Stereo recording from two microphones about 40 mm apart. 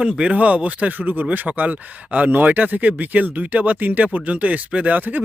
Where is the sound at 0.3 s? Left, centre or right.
Right.